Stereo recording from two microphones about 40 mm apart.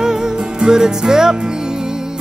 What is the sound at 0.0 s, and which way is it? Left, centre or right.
Music, centre.